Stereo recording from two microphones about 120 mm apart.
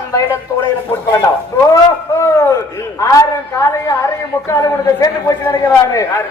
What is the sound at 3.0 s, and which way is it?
Speech, 25° left (ahead or behind).